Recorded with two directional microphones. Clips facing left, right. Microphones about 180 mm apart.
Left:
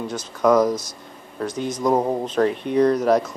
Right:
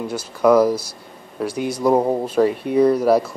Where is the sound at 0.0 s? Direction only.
10° right (ahead or behind).